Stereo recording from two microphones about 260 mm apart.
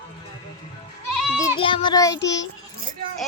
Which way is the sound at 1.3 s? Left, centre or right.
Centre.